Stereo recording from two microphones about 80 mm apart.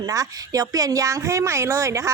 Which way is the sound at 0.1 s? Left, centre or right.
Right.